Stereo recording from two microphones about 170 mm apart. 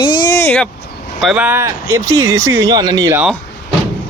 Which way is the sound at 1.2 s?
5° right (ahead or behind).